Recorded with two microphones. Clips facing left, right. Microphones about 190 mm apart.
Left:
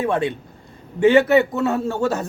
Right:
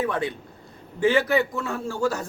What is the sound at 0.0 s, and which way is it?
A man's voice, 25° left (ahead or behind).